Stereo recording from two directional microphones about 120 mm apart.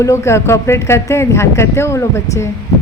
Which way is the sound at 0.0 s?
25° left (ahead or behind).